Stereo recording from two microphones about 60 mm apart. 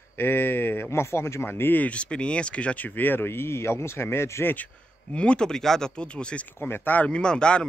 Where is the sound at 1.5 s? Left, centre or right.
Left.